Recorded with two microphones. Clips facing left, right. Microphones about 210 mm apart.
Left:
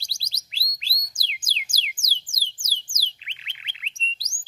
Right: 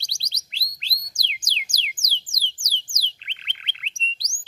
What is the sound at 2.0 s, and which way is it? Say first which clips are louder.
Music: right 1 dB; 10° left (ahead or behind).